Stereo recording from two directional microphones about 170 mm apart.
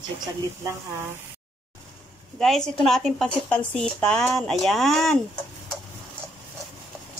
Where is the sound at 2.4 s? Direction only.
5° left (ahead or behind).